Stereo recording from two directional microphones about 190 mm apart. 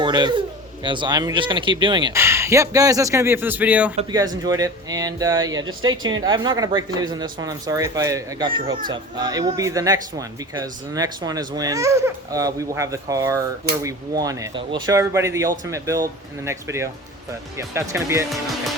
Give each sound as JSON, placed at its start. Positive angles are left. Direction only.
{"t": 0.0, "sound": "speech", "side_deg": -25}
{"t": 4.1, "sound": "speech", "side_deg": -20}